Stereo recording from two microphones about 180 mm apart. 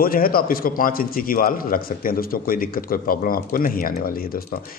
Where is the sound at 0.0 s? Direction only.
55° left (ahead or behind).